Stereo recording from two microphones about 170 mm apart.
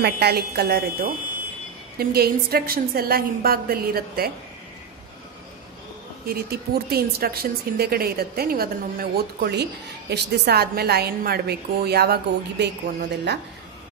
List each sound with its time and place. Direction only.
0.0 s a woman's voice: 70° right (ahead or behind)
6.2 s a woman's voice: 65° right (ahead or behind); by 13.4 s 85° right